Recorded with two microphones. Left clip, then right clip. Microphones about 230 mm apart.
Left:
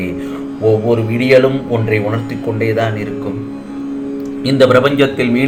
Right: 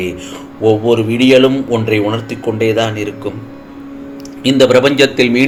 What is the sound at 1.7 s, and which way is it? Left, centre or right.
Speech, right.